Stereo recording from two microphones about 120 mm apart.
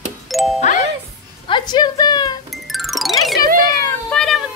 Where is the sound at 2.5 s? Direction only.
Centre (ahead or behind).